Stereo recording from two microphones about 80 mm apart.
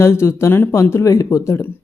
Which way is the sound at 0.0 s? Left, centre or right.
Left.